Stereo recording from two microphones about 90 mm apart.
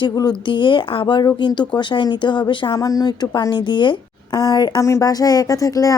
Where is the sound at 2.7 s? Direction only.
40° left (ahead or behind).